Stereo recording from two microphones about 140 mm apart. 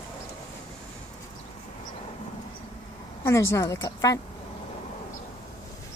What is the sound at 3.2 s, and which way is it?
A woman's voice, 20° left (ahead or behind).